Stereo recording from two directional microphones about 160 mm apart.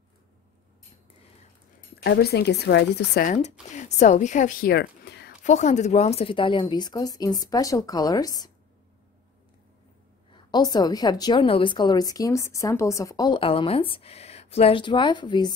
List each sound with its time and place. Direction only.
2.0 s speech: 90° left
3.3 s speech: 45° left (ahead or behind); by 5.3 s 90° left
5.4 s a woman's voice: 45° left (ahead or behind); by 8.5 s 20° left (ahead or behind)
10.3 s a woman's voice: 25° left (ahead or behind)